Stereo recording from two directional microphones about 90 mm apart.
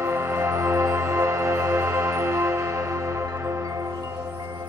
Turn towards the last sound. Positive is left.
turn(degrees=-35)  # may be behind; listen again after turning